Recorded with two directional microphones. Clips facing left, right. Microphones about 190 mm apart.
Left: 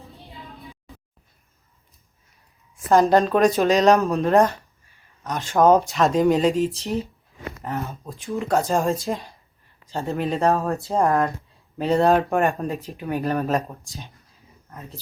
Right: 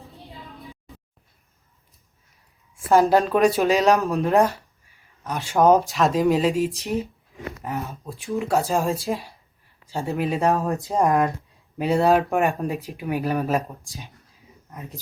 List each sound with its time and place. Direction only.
2.9 s speech: centre (ahead or behind)
6.7 s speech: 15° right (ahead or behind)
7.8 s speech: centre (ahead or behind)
10.4 s speech: 15° right (ahead or behind)
14.7 s speech: 15° right (ahead or behind)